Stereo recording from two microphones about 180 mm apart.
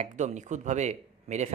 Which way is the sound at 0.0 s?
40° right (ahead or behind).